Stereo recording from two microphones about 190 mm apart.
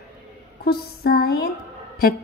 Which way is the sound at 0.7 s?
55° left (ahead or behind).